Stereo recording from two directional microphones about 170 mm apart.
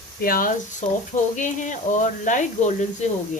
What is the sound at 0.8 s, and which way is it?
Speech, 45° left (ahead or behind).